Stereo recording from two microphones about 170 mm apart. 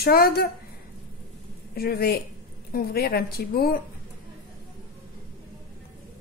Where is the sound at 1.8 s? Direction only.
65° left (ahead or behind).